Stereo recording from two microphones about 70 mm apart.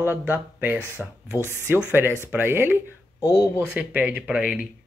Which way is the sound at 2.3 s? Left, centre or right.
Right.